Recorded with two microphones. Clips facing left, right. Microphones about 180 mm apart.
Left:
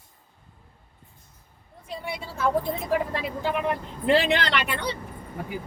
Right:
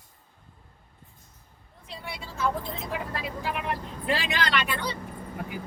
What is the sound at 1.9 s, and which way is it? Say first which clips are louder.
Speech: left 6 dB; 50° left (ahead or behind).